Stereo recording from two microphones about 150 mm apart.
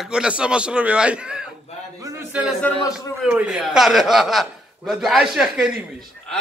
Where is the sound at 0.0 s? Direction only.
5° right (ahead or behind).